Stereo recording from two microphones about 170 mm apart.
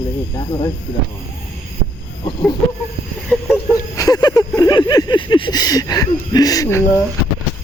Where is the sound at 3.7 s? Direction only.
20° left (ahead or behind).